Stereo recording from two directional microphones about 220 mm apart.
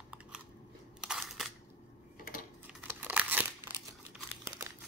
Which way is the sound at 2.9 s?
10° right (ahead or behind).